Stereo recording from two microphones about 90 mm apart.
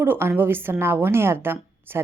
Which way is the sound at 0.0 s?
25° right (ahead or behind).